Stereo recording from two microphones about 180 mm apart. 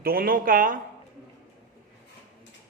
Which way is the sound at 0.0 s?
55° right (ahead or behind).